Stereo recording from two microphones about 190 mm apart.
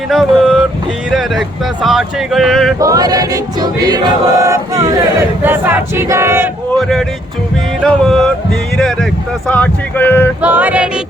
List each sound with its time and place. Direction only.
0.1 s speech: centre (ahead or behind)
2.7 s choir: 20° right (ahead or behind)
5.4 s speech: 10° right (ahead or behind)
6.7 s speech: centre (ahead or behind)
10.4 s speech: 10° right (ahead or behind)